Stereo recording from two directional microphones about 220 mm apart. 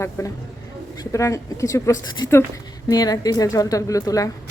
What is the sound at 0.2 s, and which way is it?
Speech, 15° left (ahead or behind).